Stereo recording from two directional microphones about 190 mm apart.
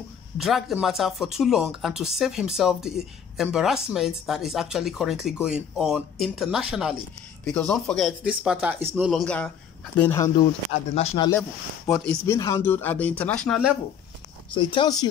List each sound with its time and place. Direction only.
0.4 s speech: centre (ahead or behind)
9.1 s speech: 5° left (ahead or behind)
11.0 s speech: 30° left (ahead or behind)
11.3 s speech: 10° left (ahead or behind)
14.5 s speech: 25° left (ahead or behind)